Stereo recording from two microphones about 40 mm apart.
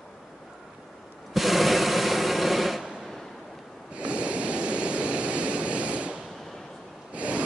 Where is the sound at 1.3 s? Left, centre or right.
Centre.